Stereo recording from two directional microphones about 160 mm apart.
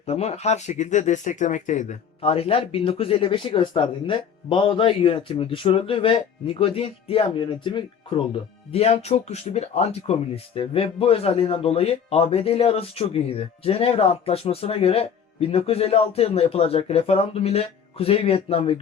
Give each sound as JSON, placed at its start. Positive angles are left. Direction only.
{"t": 0.0, "sound": "speech", "side_deg": 40}